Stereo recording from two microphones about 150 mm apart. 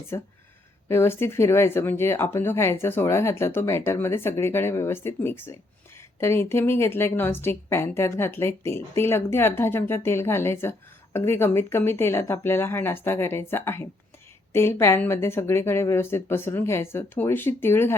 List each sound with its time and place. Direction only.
0.9 s speech: 15° left (ahead or behind)